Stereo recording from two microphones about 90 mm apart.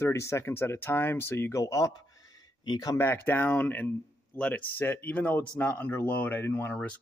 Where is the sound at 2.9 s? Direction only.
25° left (ahead or behind).